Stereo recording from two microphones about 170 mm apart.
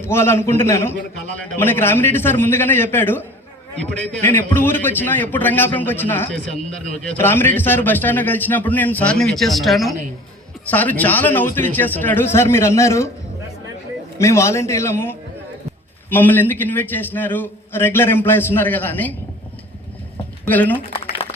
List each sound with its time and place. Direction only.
0.0 s a man's voice: 15° left (ahead or behind)
14.2 s a man's voice: 15° left (ahead or behind)
20.4 s speech: 10° left (ahead or behind)